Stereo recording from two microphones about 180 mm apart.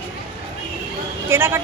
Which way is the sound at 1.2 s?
15° right (ahead or behind).